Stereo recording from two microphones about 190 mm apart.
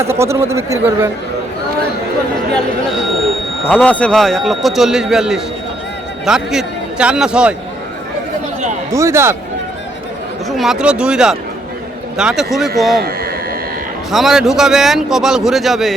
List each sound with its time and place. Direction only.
0.0 s speech: 15° right (ahead or behind)
3.7 s a man's voice: 5° left (ahead or behind)
8.9 s speech: 15° right (ahead or behind)
10.5 s a man's voice: centre (ahead or behind)
13.0 s speech: 55° right (ahead or behind)
14.1 s a man's voice: centre (ahead or behind)